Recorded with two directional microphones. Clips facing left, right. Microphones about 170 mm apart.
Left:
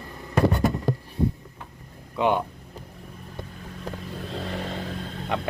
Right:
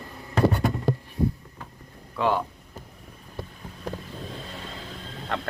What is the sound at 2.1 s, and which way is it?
Speech, 20° left (ahead or behind).